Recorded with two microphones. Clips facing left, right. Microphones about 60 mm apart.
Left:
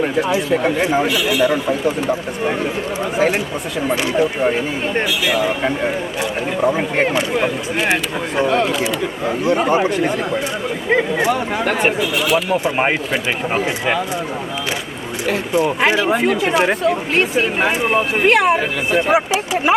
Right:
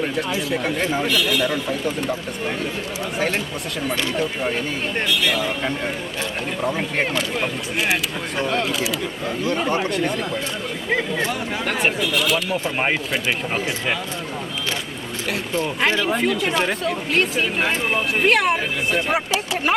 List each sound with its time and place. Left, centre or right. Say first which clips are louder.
0.2 s speech: left 6 dB; centre
9.2 s speech: left 7 dB; centre
9.6 s speech: left 5 dB; centre
11.9 s speech: left 4 dB; centre
15.3 s speech: left 7 dB; centre